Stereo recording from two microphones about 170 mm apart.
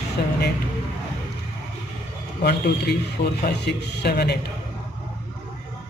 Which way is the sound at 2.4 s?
75° left (ahead or behind).